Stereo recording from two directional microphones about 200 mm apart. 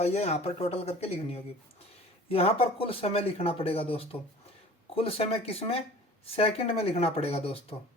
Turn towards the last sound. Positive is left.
turn(degrees=30)  # may be behind; listen again after turning